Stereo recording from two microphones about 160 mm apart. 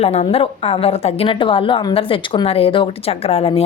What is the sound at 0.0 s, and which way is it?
A woman's voice, 40° left (ahead or behind).